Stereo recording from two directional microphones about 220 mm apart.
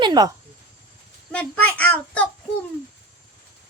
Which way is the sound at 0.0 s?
20° right (ahead or behind).